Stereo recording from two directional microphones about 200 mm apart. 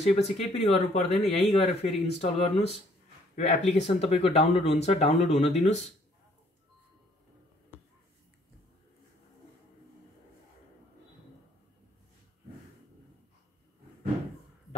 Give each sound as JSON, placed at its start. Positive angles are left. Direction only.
{"t": 0.0, "sound": "speech", "side_deg": 30}